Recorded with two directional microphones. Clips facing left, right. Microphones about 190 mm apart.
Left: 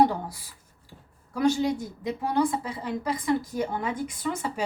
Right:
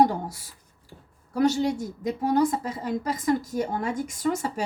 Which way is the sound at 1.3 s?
40° right (ahead or behind).